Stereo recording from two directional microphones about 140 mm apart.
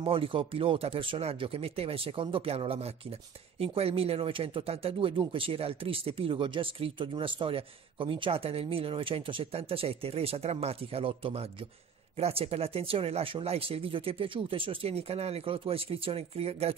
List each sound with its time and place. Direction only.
0.0 s speech: 40° right (ahead or behind)